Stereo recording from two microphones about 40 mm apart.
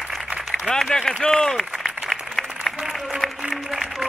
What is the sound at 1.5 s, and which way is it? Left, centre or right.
Applause, centre.